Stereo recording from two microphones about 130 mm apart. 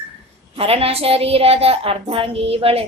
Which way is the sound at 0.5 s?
50° right (ahead or behind).